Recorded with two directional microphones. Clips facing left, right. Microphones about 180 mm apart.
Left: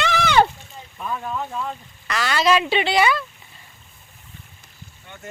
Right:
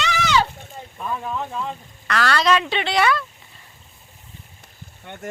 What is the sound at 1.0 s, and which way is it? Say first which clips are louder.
Speech: even; centre (ahead or behind).